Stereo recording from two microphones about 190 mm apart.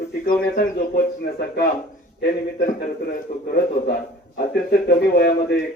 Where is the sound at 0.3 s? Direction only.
50° left (ahead or behind).